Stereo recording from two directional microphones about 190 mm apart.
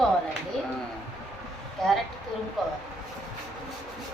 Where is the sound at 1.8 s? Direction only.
Centre (ahead or behind).